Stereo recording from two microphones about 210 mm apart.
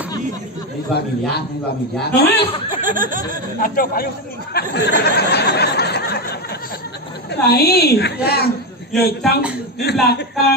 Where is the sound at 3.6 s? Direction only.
40° left (ahead or behind).